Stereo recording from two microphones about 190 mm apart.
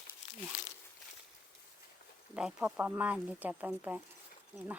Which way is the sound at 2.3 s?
5° right (ahead or behind).